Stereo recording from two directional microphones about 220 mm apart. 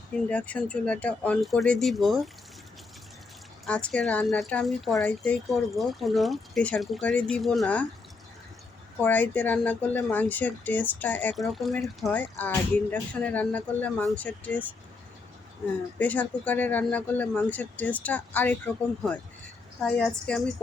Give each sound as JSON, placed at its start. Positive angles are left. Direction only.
{"t": 0.3, "sound": "speech", "side_deg": 5}
{"t": 3.7, "sound": "speech", "side_deg": 5}
{"t": 9.0, "sound": "speech", "side_deg": 10}
{"t": 16.0, "sound": "speech", "side_deg": 5}